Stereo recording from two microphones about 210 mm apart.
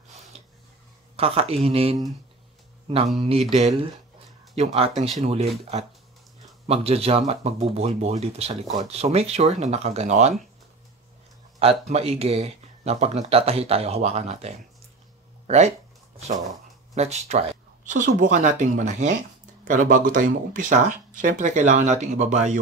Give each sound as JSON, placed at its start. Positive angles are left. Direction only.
{"t": 1.1, "sound": "speech", "side_deg": -30}
{"t": 3.3, "sound": "speech", "side_deg": -30}
{"t": 4.7, "sound": "speech", "side_deg": -30}
{"t": 6.7, "sound": "speech", "side_deg": -30}
{"t": 11.6, "sound": "speech", "side_deg": -30}
{"t": 16.9, "sound": "speech", "side_deg": -30}